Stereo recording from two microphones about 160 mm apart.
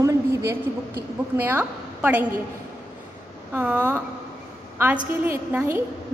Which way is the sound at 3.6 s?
10° right (ahead or behind).